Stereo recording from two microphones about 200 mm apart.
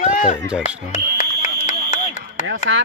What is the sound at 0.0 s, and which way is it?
Music, 40° left (ahead or behind).